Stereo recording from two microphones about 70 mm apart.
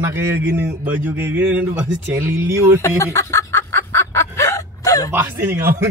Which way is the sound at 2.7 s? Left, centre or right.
Left.